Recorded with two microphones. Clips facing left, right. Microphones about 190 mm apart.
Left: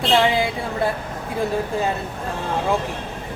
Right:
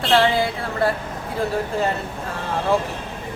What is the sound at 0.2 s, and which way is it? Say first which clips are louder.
Speech: even; 15° left (ahead or behind).